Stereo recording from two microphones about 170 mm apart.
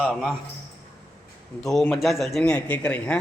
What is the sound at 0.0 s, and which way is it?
Speech, centre (ahead or behind).